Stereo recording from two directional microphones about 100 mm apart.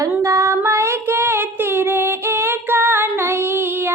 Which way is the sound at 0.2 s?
30° right (ahead or behind).